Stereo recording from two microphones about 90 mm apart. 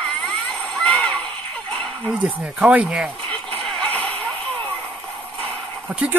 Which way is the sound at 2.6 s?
15° right (ahead or behind).